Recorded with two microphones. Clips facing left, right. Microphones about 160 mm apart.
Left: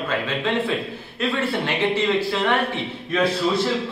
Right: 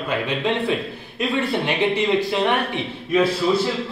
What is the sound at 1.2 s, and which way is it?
A man's voice, 15° right (ahead or behind).